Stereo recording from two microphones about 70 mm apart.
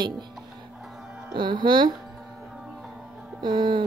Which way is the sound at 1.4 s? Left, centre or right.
Right.